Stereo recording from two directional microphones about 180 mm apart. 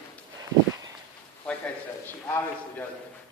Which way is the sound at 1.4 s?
10° left (ahead or behind).